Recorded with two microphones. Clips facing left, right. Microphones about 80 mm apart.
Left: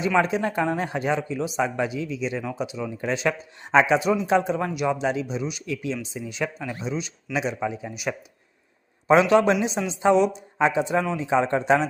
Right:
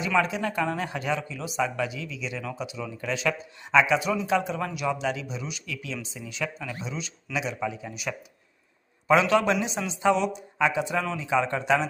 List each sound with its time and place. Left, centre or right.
0.0 s a man's voice: left